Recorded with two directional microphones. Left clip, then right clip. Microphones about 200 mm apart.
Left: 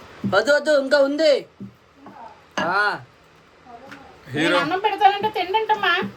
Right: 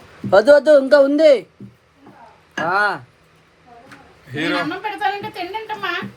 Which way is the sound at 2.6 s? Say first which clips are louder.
Right 3 dB; 25° right (ahead or behind).